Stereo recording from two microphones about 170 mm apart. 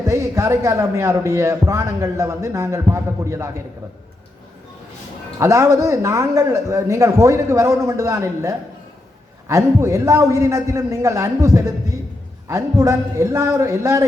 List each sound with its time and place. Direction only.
0.0 s a man's voice: 15° right (ahead or behind)
5.4 s a man's voice: 15° right (ahead or behind)